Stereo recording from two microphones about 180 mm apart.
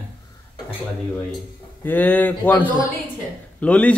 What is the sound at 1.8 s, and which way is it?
A man's voice, 10° left (ahead or behind).